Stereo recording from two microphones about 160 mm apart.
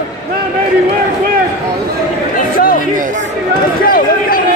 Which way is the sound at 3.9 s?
65° left (ahead or behind).